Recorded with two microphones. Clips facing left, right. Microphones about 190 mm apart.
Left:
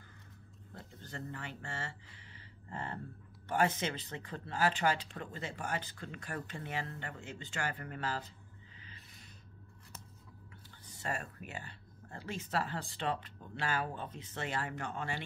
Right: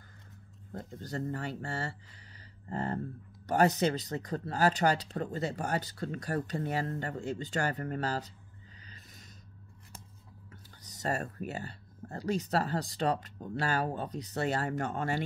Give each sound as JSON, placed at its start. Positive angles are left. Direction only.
{"t": 0.7, "sound": "speech", "side_deg": -40}
{"t": 8.8, "sound": "music", "side_deg": -40}
{"t": 10.5, "sound": "speech", "side_deg": -40}